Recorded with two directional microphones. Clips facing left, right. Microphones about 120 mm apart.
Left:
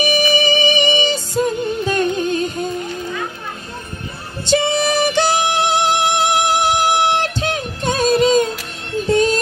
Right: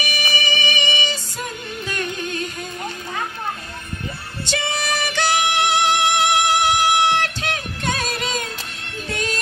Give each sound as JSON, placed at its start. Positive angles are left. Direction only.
{"t": 0.0, "sound": "music", "side_deg": 30}
{"t": 4.5, "sound": "music", "side_deg": 25}